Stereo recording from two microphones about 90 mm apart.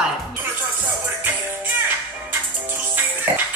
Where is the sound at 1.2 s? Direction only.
20° right (ahead or behind).